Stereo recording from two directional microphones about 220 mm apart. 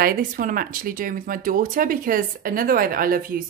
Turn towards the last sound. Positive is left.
turn(degrees=-40)  # may be behind; listen again after turning